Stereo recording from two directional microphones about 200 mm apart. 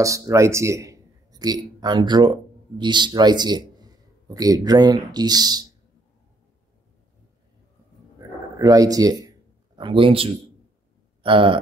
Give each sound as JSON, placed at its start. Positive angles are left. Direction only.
{"t": 0.0, "sound": "a man's voice", "side_deg": -15}
{"t": 8.5, "sound": "speech", "side_deg": -15}